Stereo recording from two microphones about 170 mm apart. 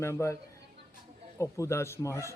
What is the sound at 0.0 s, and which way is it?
Speech, 15° left (ahead or behind).